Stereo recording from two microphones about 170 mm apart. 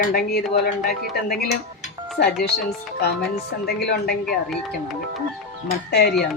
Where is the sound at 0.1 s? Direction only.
65° left (ahead or behind).